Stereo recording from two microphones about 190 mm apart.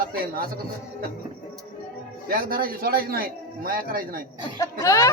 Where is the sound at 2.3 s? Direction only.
50° right (ahead or behind).